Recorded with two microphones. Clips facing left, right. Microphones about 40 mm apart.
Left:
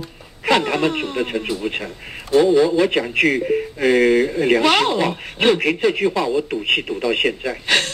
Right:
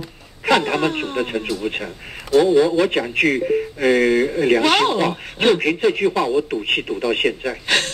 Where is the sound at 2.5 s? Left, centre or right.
Right.